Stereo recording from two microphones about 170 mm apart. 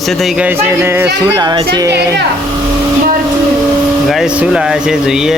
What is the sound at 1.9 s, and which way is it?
Speech, 80° right.